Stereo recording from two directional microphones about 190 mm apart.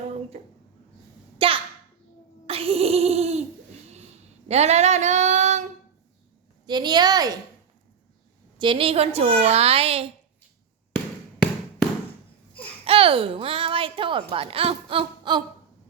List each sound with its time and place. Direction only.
0.3 s a woman's voice: 30° right (ahead or behind)
1.4 s a sound: 30° right (ahead or behind)
4.4 s female singing: 35° right (ahead or behind)
6.7 s a child's voice: 20° right (ahead or behind)
8.5 s a woman's voice: 25° right (ahead or behind)
12.8 s a child's voice: 30° right (ahead or behind)